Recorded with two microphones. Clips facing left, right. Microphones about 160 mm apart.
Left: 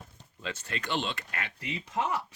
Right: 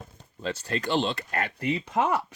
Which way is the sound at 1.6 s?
60° right (ahead or behind).